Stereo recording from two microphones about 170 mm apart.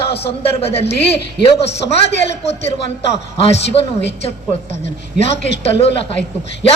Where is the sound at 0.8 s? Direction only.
80° left.